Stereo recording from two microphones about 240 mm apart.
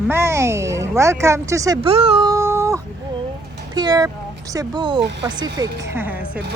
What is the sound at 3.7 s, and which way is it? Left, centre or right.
Speech, centre.